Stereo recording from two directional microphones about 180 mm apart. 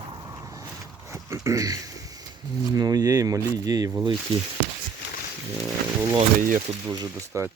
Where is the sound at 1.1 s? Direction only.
15° right (ahead or behind).